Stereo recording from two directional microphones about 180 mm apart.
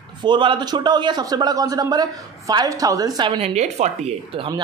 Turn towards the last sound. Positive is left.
turn(degrees=-30)  # may be behind; listen again after turning